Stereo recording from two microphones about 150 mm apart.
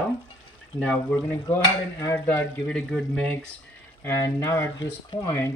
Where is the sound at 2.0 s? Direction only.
15° left (ahead or behind).